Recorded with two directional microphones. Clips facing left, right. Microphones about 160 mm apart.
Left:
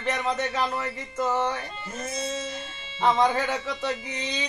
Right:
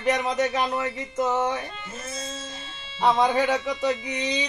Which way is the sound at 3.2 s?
15° right (ahead or behind).